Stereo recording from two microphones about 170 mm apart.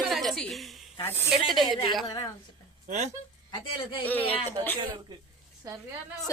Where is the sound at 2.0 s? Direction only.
25° left (ahead or behind).